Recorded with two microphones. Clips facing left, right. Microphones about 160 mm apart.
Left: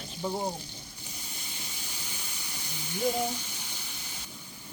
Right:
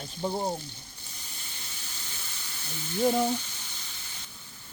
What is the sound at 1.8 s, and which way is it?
Hiss, 15° left (ahead or behind).